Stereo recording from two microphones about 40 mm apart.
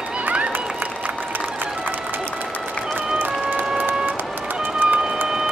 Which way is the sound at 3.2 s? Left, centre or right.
Right.